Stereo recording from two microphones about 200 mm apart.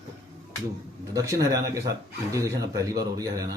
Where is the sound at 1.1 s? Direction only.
15° right (ahead or behind).